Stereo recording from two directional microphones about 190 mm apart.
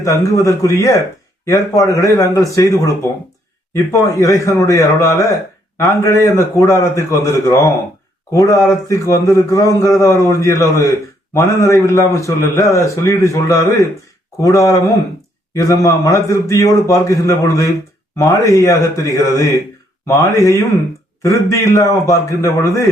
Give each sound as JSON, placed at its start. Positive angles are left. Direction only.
{"t": 0.0, "sound": "a man's voice", "side_deg": 15}
{"t": 8.7, "sound": "speech", "side_deg": 15}